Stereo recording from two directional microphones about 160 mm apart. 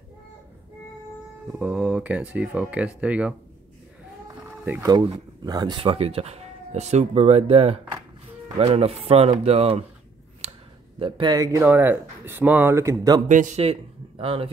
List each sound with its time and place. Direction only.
1.5 s speech: 10° right (ahead or behind)
4.6 s speech: 20° right (ahead or behind); by 9.8 s 40° right (ahead or behind)
10.4 s a sound: 40° right (ahead or behind)
11.0 s speech: 30° right (ahead or behind)
13.3 s speech: 50° right (ahead or behind)